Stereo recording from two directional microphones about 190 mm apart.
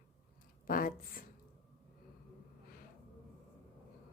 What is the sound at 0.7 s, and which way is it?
Speech, 45° left (ahead or behind).